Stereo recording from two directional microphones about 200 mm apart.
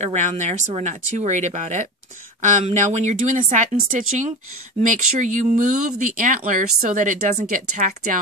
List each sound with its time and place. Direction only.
0.0 s speech: 35° right (ahead or behind)